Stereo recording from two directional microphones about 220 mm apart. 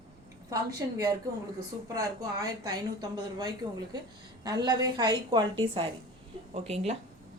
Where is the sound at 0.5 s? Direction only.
15° right (ahead or behind).